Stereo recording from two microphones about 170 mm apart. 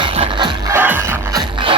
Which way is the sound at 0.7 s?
10° right (ahead or behind).